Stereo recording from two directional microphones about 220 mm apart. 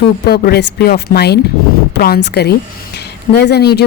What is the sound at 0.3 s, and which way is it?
Speech, 45° left (ahead or behind).